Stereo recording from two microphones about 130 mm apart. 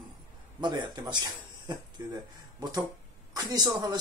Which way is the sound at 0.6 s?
35° right (ahead or behind).